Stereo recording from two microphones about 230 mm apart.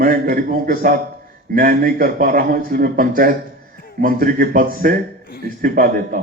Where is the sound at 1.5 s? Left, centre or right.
Right.